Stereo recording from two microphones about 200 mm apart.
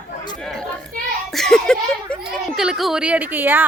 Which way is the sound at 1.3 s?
Centre (ahead or behind).